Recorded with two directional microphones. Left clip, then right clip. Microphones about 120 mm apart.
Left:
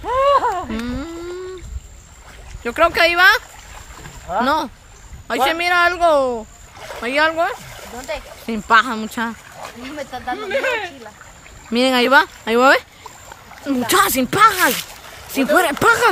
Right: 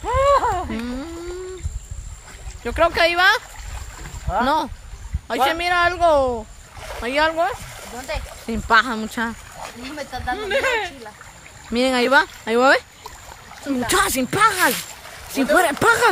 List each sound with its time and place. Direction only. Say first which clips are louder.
0.0 s a sound: left 2 dB; 15° right (ahead or behind)
0.7 s a sound: left 2 dB; 15° left (ahead or behind)
2.6 s speech: left 3 dB; 15° left (ahead or behind)
8.1 s speech: left 2 dB; 15° right (ahead or behind)
8.5 s speech: left 2 dB; 5° left (ahead or behind)
9.8 s speech: left 1 dB; 25° right (ahead or behind)
11.7 s speech: left 3 dB; 20° left (ahead or behind)